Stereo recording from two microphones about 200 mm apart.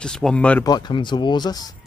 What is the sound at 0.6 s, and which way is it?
Speech, 20° left (ahead or behind).